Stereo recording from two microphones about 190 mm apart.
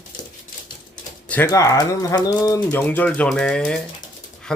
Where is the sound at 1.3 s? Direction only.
15° left (ahead or behind).